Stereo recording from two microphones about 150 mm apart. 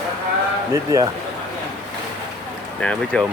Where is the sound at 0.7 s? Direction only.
25° right (ahead or behind).